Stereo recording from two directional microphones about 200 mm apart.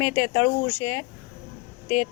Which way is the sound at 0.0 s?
20° left (ahead or behind).